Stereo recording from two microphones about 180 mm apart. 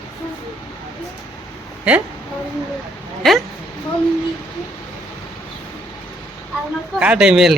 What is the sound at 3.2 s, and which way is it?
Speech, centre (ahead or behind).